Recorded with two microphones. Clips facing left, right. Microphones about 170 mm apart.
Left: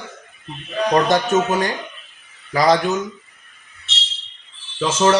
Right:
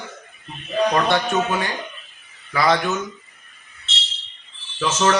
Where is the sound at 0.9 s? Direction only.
40° left (ahead or behind).